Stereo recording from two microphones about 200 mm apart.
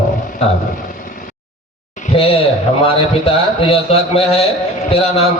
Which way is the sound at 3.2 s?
30° left (ahead or behind).